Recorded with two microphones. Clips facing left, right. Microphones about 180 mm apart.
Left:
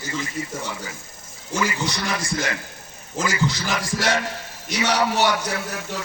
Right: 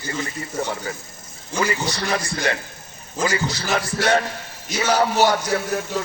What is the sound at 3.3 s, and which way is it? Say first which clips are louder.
Speech: even; 35° right (ahead or behind).